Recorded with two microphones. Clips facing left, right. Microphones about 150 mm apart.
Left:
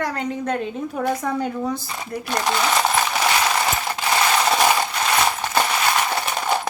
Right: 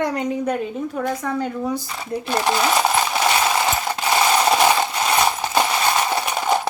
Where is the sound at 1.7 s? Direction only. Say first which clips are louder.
Right 2 dB; 10° right (ahead or behind).